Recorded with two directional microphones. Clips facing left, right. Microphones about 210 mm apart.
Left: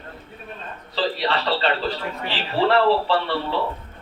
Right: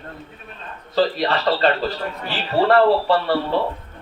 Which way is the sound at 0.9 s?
45° right (ahead or behind).